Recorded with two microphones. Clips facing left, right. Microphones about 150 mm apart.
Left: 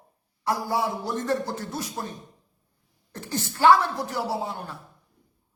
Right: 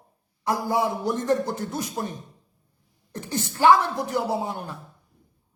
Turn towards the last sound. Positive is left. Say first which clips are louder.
# right 2 dB
turn(degrees=-15)  # may be behind; listen again after turning